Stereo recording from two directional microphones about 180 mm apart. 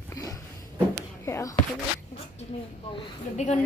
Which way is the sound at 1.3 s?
15° left (ahead or behind).